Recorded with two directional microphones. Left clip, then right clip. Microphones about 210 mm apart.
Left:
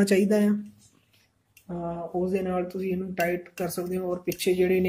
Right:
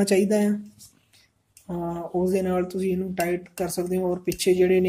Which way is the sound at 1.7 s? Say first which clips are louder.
Right 2 dB; 30° right (ahead or behind).